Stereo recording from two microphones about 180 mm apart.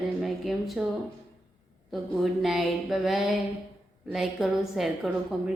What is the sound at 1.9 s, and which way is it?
A woman's voice, centre (ahead or behind).